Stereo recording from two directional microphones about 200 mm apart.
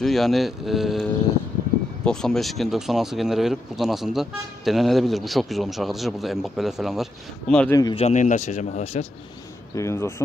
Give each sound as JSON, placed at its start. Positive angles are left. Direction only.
{"t": 0.0, "sound": "speech", "side_deg": 0}
{"t": 2.0, "sound": "speech", "side_deg": 0}
{"t": 7.7, "sound": "a man's voice", "side_deg": 20}
{"t": 8.0, "sound": "speech", "side_deg": 35}
{"t": 9.8, "sound": "speech", "side_deg": 15}